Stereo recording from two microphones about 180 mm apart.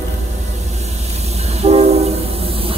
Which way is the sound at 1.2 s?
35° right (ahead or behind).